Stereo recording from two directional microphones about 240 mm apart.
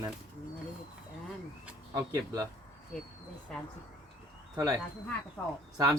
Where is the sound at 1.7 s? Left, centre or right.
Centre.